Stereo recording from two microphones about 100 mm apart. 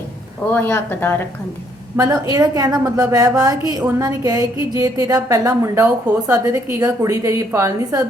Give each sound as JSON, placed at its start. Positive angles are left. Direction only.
{"t": 0.5, "sound": "speech", "side_deg": 20}
{"t": 2.0, "sound": "a woman's voice", "side_deg": -40}